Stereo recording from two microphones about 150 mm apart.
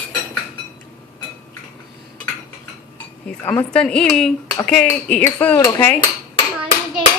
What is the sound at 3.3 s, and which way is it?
Speech, 10° left (ahead or behind).